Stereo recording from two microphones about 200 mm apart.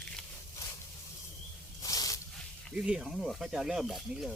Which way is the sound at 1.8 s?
15° left (ahead or behind).